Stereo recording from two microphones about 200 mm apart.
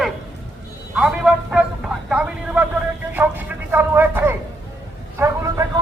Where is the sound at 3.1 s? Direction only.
10° right (ahead or behind).